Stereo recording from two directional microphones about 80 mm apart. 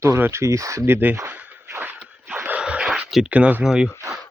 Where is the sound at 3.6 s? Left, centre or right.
Centre.